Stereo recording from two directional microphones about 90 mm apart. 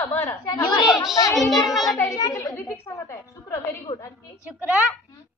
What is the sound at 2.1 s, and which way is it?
A child's voice, 45° left (ahead or behind).